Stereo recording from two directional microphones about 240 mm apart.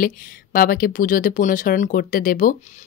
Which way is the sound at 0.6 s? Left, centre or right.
Left.